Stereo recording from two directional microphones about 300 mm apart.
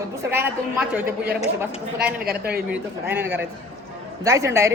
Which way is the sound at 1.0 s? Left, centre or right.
Right.